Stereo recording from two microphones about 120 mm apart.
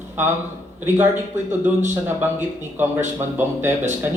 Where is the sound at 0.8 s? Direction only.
20° right (ahead or behind).